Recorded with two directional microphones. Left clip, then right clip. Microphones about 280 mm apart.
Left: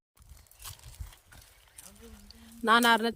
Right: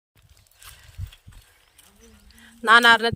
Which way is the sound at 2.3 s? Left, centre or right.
Centre.